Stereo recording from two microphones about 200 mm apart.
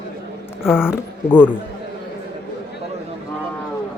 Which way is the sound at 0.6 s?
5° right (ahead or behind).